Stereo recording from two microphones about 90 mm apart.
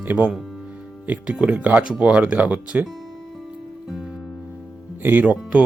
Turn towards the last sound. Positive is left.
turn(degrees=-20)  # may be behind; listen again after turning